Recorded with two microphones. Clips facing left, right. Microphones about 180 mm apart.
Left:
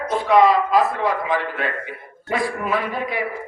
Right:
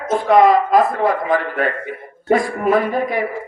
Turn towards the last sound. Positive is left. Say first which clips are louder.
# right 6 dB
turn(degrees=-45)  # may be behind; listen again after turning